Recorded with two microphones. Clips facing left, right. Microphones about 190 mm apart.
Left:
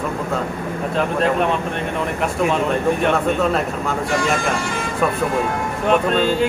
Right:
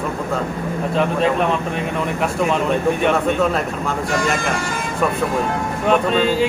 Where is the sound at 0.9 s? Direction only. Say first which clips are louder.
Right 1 dB; centre (ahead or behind).